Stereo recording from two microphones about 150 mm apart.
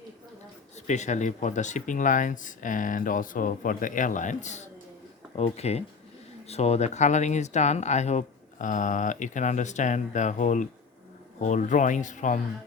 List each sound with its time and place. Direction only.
0.9 s speech: 50° left (ahead or behind)